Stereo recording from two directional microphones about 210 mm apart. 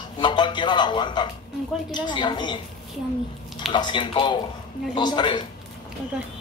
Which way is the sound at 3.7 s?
20° left (ahead or behind).